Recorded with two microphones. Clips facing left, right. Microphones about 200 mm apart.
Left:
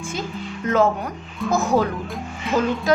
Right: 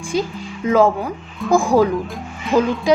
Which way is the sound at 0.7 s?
10° right (ahead or behind).